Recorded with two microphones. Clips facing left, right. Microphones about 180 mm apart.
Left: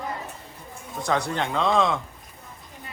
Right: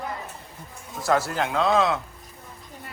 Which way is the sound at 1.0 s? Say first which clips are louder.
Right 2 dB; 5° right (ahead or behind).